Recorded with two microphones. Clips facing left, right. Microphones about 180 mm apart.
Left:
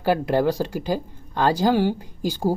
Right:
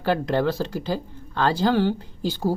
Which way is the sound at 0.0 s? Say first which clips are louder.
Left 2 dB; 10° left (ahead or behind).